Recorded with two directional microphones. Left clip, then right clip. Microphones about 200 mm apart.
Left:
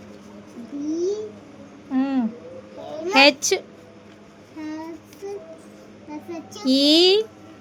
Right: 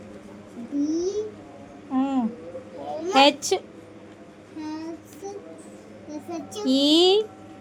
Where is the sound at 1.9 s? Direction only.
10° left (ahead or behind).